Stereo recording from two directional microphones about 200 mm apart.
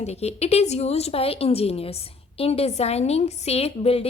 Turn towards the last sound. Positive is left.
turn(degrees=30)  # may be behind; listen again after turning